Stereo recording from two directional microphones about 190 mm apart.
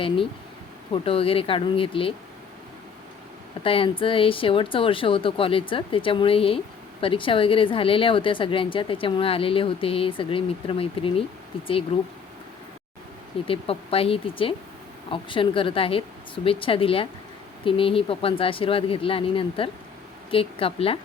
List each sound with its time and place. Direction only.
1.0 s a woman's voice: 30° left (ahead or behind)
3.6 s a woman's voice: 30° left (ahead or behind)
13.5 s a woman's voice: 30° left (ahead or behind)